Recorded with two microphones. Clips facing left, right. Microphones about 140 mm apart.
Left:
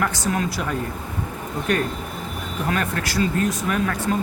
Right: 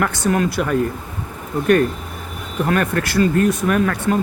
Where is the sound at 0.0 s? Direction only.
60° right (ahead or behind).